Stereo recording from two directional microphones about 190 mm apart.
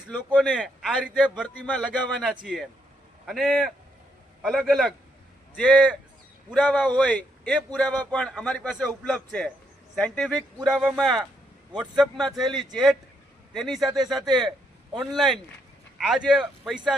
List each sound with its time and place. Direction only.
0.5 s a man's voice: 5° right (ahead or behind)
14.2 s speech: 20° right (ahead or behind)
14.9 s a man's voice: centre (ahead or behind)